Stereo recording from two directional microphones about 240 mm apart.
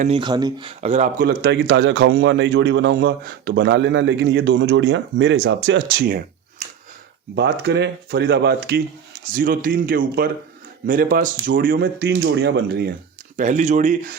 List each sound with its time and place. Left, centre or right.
0.0 s speech: right
1.2 s a man's voice: right
7.3 s a man's voice: right
13.3 s speech: right